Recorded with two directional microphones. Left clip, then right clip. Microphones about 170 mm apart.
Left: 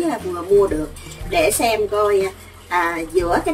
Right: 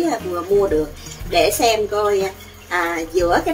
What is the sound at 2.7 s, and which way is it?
Speech, centre (ahead or behind).